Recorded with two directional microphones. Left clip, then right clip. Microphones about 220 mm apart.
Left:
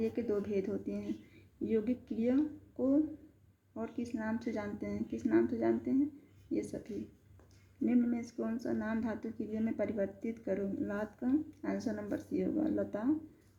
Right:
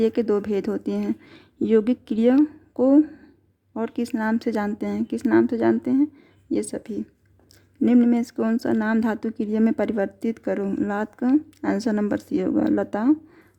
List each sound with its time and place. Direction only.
0.0 s a woman's voice: 55° right (ahead or behind)
7.9 s a woman's voice: 50° right (ahead or behind)